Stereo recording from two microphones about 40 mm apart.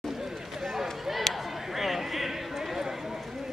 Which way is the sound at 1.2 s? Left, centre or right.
Centre.